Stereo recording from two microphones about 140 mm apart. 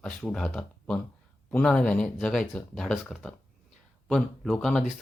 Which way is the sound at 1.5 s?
5° left (ahead or behind).